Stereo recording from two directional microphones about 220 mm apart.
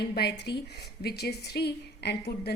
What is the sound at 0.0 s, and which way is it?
A woman's voice, 50° left (ahead or behind).